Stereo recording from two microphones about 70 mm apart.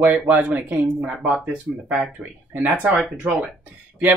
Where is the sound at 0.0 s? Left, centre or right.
Right.